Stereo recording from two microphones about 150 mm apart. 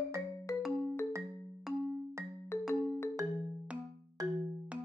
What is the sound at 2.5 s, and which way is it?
Music, 15° left (ahead or behind).